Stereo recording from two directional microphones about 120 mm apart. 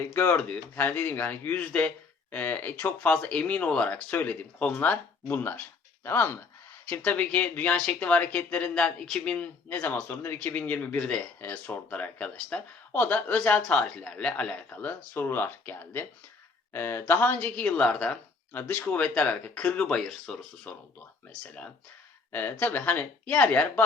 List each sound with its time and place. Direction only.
0.1 s speech: 20° left (ahead or behind)
0.3 s speech: 10° left (ahead or behind)
22.3 s speech: 15° left (ahead or behind)